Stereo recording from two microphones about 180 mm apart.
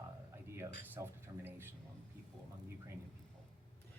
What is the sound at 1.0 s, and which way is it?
Speech, 15° right (ahead or behind).